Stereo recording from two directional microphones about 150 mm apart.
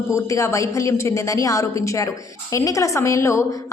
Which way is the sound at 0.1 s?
20° left (ahead or behind).